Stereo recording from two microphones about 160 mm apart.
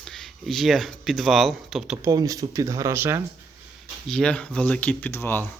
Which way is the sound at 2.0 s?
20° right (ahead or behind).